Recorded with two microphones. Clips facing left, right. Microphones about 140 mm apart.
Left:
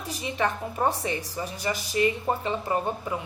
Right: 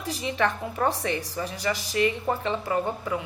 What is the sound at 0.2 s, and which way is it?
A woman's voice, 15° left (ahead or behind).